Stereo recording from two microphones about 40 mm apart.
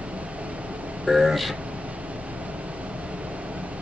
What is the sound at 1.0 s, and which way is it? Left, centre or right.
Speech, centre.